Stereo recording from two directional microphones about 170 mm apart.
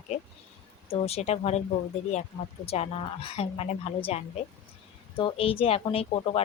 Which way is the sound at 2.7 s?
35° left (ahead or behind).